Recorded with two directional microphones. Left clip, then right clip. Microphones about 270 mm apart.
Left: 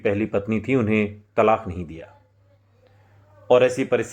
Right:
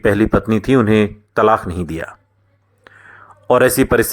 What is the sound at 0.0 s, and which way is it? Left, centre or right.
Speech, right.